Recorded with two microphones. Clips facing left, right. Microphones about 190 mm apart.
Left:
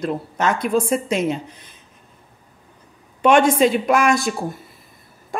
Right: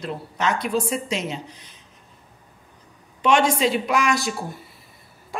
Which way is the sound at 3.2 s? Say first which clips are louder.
Left 5 dB; 55° left (ahead or behind).